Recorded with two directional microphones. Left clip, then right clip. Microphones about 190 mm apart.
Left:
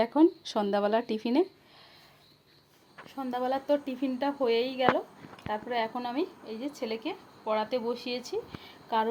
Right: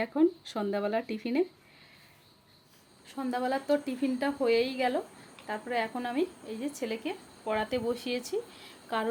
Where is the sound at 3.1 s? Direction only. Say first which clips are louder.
Even; 5° right (ahead or behind); by 8.3 s 20° right (ahead or behind).